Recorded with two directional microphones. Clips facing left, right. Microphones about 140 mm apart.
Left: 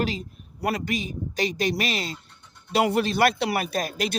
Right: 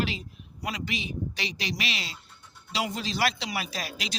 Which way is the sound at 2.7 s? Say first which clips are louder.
Left 9 dB; 60° left (ahead or behind).